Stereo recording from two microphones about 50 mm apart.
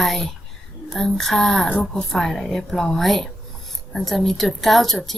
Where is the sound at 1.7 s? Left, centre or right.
Left.